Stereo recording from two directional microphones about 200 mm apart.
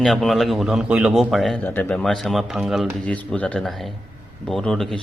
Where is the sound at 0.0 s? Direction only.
Centre (ahead or behind).